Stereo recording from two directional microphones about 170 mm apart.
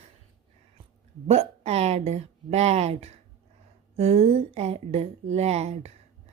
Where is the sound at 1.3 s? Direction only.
40° right (ahead or behind).